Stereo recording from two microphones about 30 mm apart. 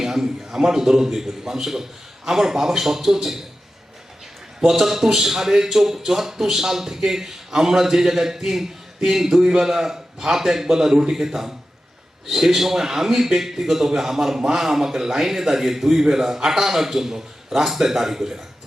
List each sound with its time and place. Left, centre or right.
0.0 s a man's voice: centre
4.6 s a man's voice: centre